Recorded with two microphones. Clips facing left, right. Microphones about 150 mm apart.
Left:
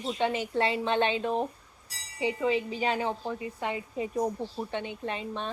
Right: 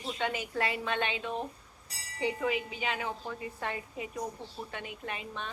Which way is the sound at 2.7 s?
35° left (ahead or behind).